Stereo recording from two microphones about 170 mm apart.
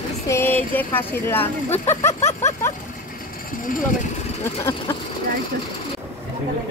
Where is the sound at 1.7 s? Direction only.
40° left (ahead or behind).